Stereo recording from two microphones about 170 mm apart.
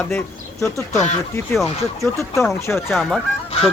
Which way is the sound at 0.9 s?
45° left (ahead or behind).